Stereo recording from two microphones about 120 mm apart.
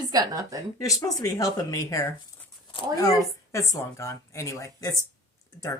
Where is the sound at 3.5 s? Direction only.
25° left (ahead or behind).